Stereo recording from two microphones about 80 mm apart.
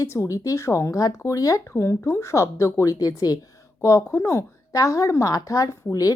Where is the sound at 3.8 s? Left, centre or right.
Left.